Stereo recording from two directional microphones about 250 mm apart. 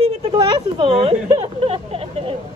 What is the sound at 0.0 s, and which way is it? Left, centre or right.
Speech, right.